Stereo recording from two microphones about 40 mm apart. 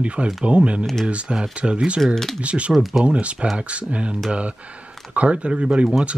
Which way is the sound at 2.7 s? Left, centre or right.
Centre.